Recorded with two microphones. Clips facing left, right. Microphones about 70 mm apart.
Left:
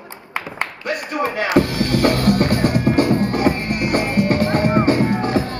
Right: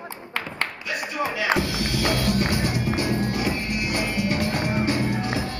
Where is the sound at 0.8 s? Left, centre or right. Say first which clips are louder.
Left 7 dB; left.